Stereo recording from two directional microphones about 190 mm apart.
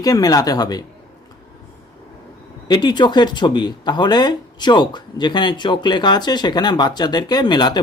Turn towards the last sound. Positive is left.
turn(degrees=20)  # may be behind; listen again after turning